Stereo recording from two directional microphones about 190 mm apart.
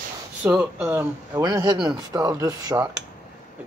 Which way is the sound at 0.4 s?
10° right (ahead or behind).